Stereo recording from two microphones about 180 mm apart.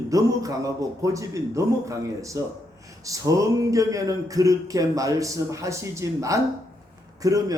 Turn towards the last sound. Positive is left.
turn(degrees=-20)  # may be behind; listen again after turning